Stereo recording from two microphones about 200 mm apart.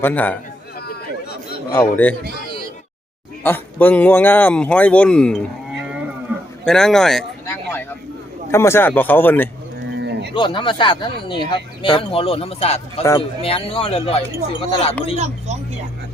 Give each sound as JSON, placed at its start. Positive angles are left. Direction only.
{"t": 0.0, "sound": "speech", "side_deg": 10}
{"t": 0.8, "sound": "chatter", "side_deg": 50}
{"t": 1.7, "sound": "speech", "side_deg": 10}
{"t": 3.4, "sound": "speech", "side_deg": 10}
{"t": 6.3, "sound": "a sound", "side_deg": -10}
{"t": 6.7, "sound": "a sound", "side_deg": 5}
{"t": 8.4, "sound": "speech", "side_deg": 15}
{"t": 10.0, "sound": "a sound", "side_deg": -55}
{"t": 10.3, "sound": "speech", "side_deg": 25}
{"t": 13.0, "sound": "speech", "side_deg": 15}
{"t": 13.4, "sound": "speech", "side_deg": 30}
{"t": 15.1, "sound": "speech", "side_deg": -35}